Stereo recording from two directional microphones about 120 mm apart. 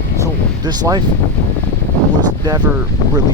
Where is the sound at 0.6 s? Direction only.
35° right (ahead or behind).